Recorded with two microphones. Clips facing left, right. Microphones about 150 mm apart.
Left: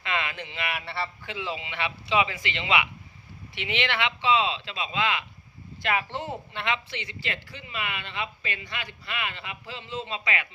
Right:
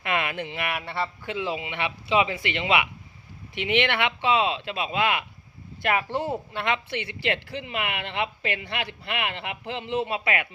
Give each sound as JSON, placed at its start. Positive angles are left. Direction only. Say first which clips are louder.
{"t": 0.0, "sound": "speech", "louder": "right 4 dB", "side_deg": -55}